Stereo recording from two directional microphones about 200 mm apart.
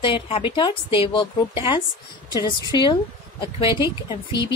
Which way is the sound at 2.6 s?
20° left (ahead or behind).